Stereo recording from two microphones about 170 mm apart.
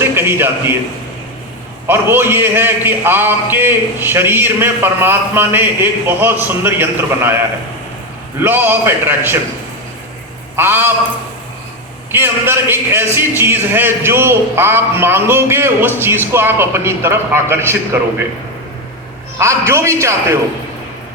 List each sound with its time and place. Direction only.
0.0 s a man's voice: 15° right (ahead or behind)
1.9 s a man's voice: 15° right (ahead or behind)
8.4 s a man's voice: 10° right (ahead or behind)
10.6 s a man's voice: 15° right (ahead or behind)
12.1 s a man's voice: 15° right (ahead or behind)
19.4 s a man's voice: 15° right (ahead or behind)